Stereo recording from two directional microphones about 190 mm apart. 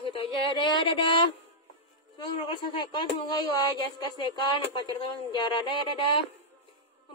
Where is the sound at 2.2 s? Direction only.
25° left (ahead or behind).